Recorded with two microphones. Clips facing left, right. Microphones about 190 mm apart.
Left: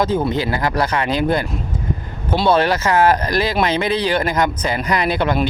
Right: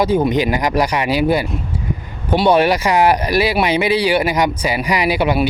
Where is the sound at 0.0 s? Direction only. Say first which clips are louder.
Right 3 dB; 15° right (ahead or behind).